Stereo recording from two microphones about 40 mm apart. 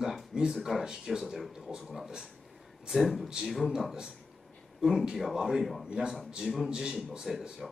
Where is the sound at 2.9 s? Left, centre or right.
Centre.